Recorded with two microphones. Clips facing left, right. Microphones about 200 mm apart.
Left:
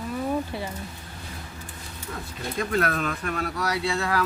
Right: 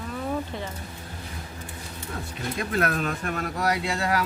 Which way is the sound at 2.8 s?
45° right (ahead or behind).